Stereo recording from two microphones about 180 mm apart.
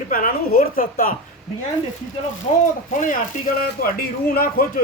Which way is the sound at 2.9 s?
45° left (ahead or behind).